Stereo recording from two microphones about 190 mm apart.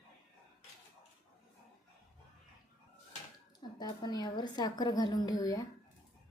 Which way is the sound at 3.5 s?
20° left (ahead or behind).